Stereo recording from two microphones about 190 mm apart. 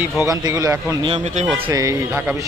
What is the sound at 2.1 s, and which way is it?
Speech, 5° right (ahead or behind).